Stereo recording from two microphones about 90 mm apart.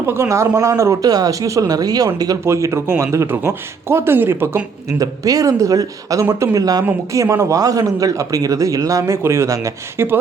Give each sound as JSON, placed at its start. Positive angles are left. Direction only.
{"t": 0.1, "sound": "speech", "side_deg": -30}
{"t": 2.4, "sound": "speech", "side_deg": -30}
{"t": 4.9, "sound": "speech", "side_deg": -40}